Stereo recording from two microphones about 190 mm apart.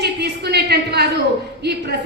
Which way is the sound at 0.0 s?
60° right (ahead or behind).